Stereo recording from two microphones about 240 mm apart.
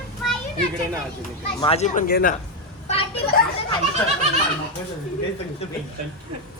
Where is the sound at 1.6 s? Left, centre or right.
Left.